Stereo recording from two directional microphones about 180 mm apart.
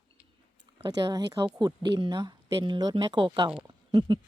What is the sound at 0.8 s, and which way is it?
Speech, 20° right (ahead or behind).